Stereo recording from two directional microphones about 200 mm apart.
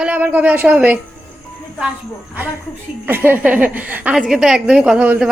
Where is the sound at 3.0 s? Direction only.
10° right (ahead or behind).